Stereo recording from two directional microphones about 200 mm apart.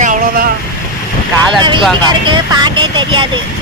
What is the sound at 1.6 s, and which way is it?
Speech, 25° right (ahead or behind).